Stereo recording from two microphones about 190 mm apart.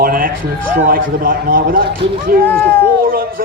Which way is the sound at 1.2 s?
50° right (ahead or behind).